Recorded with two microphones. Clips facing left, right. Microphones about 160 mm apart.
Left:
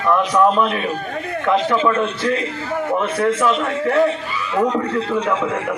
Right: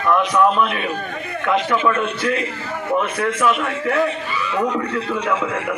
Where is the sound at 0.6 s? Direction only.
35° left (ahead or behind).